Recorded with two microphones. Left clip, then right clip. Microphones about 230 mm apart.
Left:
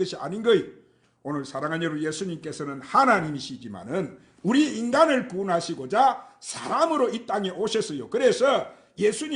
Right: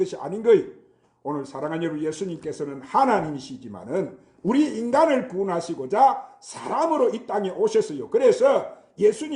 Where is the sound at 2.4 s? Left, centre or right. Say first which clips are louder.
Right 3 dB; left.